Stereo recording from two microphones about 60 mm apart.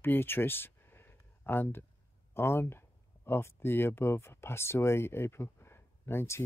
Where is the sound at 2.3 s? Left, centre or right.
Left.